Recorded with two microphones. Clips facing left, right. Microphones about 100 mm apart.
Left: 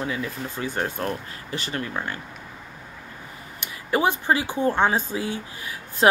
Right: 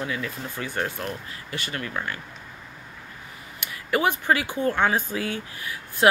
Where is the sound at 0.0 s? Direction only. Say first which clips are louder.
Left 2 dB; 25° left (ahead or behind).